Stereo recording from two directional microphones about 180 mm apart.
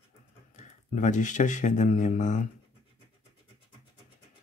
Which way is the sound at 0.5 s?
45° left (ahead or behind).